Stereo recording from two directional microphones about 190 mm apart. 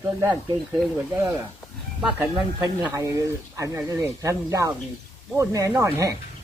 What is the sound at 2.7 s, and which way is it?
Speech, 10° right (ahead or behind).